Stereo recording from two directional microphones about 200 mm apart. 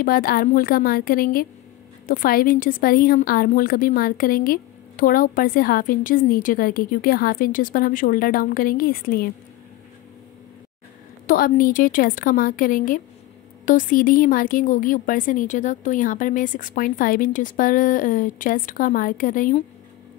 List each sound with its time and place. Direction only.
0.0 s a woman's voice: 45° left (ahead or behind)
11.2 s a woman's voice: 45° left (ahead or behind)